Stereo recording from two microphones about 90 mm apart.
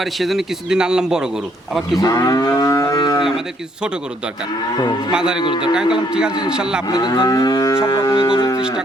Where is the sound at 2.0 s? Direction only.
45° left (ahead or behind).